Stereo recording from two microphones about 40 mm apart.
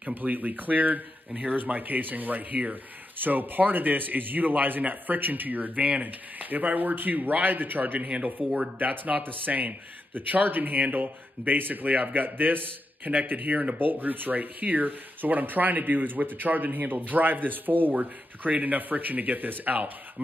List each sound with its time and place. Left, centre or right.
0.1 s speech: right
6.5 s speech: right